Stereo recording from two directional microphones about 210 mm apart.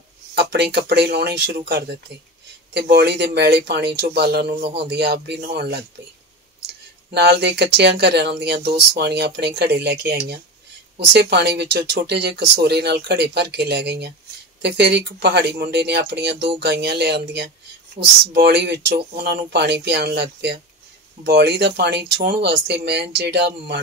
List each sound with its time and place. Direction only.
0.3 s speech: 50° right (ahead or behind)
7.2 s speech: 50° right (ahead or behind)
18.0 s speech: 30° right (ahead or behind)
18.3 s speech: 55° right (ahead or behind)